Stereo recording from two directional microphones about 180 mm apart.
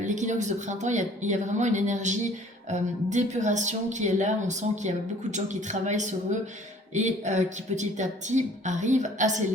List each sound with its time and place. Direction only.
0.0 s speech: 45° right (ahead or behind)